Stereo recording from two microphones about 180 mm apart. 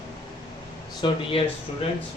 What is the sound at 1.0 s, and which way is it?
Speech, 30° left (ahead or behind).